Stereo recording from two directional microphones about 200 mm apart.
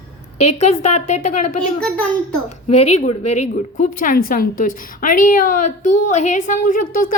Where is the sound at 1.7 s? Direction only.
5° left (ahead or behind).